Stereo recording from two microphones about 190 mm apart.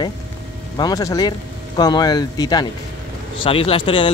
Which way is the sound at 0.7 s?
20° left (ahead or behind).